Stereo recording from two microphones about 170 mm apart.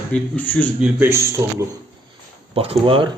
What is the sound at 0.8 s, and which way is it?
Speech, 10° right (ahead or behind).